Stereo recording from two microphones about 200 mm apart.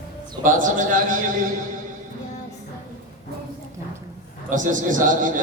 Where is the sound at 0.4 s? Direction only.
40° right (ahead or behind).